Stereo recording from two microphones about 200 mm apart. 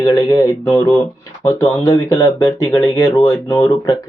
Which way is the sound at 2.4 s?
15° left (ahead or behind).